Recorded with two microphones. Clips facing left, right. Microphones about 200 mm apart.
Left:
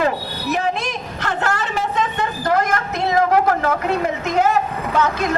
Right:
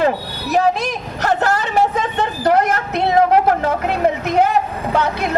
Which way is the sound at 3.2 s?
25° right (ahead or behind).